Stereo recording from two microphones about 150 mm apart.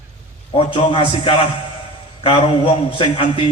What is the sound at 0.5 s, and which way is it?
Speech, 35° left (ahead or behind).